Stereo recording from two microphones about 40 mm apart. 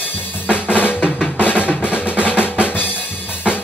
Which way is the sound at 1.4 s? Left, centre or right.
Left.